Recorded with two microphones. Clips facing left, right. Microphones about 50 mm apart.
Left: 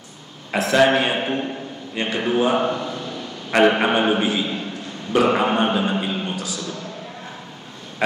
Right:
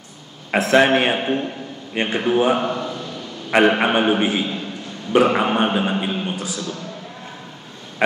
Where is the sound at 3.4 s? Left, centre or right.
Centre.